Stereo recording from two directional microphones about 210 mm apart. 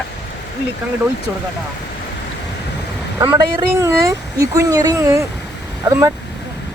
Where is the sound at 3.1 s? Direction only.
15° right (ahead or behind).